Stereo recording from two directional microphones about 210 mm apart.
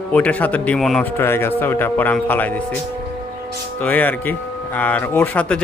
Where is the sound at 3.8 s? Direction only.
10° left (ahead or behind).